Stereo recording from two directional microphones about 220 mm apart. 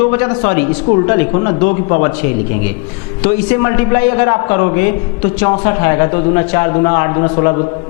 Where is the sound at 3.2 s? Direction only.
10° left (ahead or behind).